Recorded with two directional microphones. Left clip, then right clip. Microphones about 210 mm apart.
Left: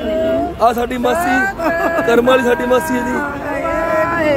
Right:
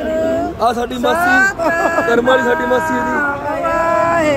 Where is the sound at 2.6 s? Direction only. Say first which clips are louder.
Even; 45° right (ahead or behind).